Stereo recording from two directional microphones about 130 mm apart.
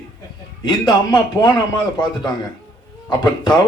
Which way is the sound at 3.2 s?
30° left (ahead or behind).